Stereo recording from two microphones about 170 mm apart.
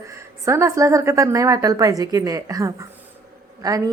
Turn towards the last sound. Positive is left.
turn(degrees=-20)  # may be behind; listen again after turning